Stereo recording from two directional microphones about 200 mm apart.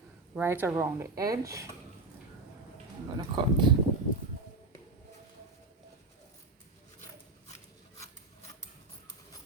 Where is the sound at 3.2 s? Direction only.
20° right (ahead or behind).